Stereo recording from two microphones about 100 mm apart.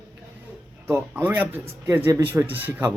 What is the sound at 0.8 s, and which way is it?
Speech, 25° right (ahead or behind).